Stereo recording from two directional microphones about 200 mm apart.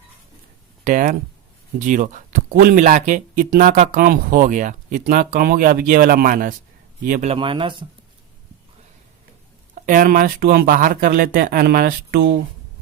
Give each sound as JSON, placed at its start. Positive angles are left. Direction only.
{"t": 0.9, "sound": "speech", "side_deg": -40}
{"t": 7.3, "sound": "speech", "side_deg": -25}
{"t": 9.8, "sound": "speech", "side_deg": -45}